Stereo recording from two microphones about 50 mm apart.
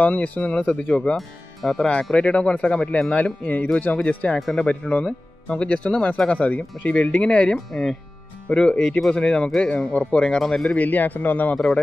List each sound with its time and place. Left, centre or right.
0.0 s speech: left
1.1 s speech: centre
2.1 s speech: left
7.5 s speech: centre; by 10.2 s left
10.4 s speech: centre
10.7 s speech: left
11.5 s speech: centre